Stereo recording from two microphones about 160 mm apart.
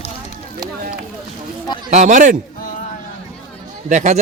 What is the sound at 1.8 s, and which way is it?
Speech, 50° right (ahead or behind).